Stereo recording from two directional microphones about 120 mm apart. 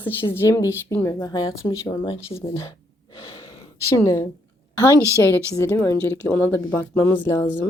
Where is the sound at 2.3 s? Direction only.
25° left (ahead or behind).